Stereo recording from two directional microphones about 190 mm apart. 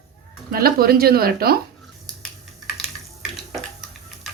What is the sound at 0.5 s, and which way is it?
Speech, 55° right (ahead or behind).